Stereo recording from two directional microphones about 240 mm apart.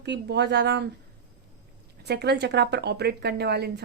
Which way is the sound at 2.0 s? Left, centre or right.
Right.